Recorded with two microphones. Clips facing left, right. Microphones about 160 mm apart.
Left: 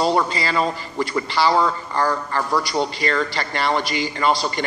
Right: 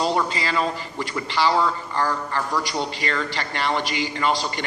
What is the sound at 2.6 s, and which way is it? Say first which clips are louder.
A man's voice: left 4 dB; 35° left (ahead or behind).